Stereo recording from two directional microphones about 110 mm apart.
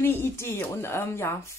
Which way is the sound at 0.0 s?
20° left (ahead or behind).